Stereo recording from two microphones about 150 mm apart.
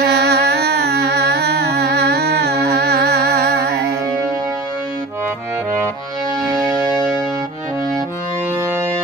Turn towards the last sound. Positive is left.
turn(degrees=-25)  # may be behind; listen again after turning